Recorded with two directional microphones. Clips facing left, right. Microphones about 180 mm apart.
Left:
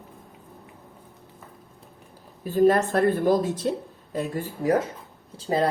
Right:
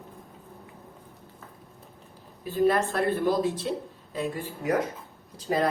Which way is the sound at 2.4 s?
45° left (ahead or behind).